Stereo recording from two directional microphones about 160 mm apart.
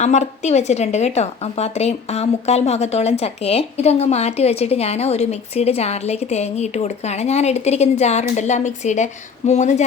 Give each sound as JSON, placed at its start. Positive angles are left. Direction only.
{"t": 0.0, "sound": "a woman's voice", "side_deg": 45}